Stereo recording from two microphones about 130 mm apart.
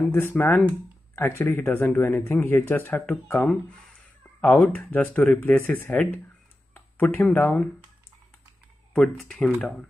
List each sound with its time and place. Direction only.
0.1 s speech: 15° left (ahead or behind)
4.6 s speech: 15° left (ahead or behind)
8.9 s speech: 5° left (ahead or behind)